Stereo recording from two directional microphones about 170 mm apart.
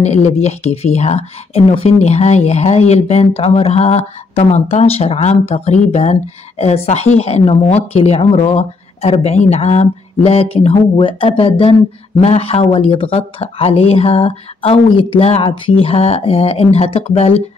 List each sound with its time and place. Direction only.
0.0 s speech: 40° left (ahead or behind)